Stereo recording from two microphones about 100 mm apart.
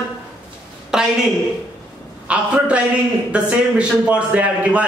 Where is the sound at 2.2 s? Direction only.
10° right (ahead or behind).